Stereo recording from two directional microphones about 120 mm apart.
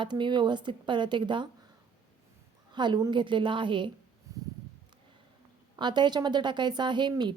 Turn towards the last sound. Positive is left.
turn(degrees=-40)  # may be behind; listen again after turning